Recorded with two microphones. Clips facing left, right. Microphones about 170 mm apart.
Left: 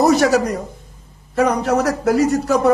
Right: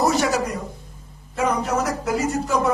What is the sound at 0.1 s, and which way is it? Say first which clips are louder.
Speech: left 7 dB; 65° left (ahead or behind).